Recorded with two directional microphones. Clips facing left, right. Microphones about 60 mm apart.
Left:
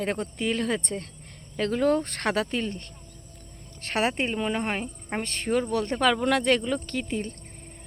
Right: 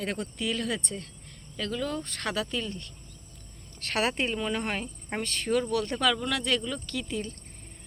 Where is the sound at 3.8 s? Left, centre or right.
Left.